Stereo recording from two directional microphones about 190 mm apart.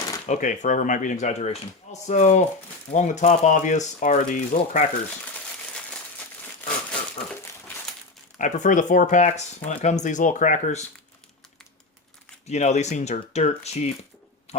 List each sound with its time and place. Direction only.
0.3 s speech: 40° left (ahead or behind)
6.6 s crumpling: 10° left (ahead or behind)
8.4 s speech: 40° left (ahead or behind)
12.5 s speech: 35° left (ahead or behind)